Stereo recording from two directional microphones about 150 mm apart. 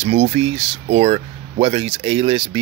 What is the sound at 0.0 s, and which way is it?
Speech, 40° right (ahead or behind).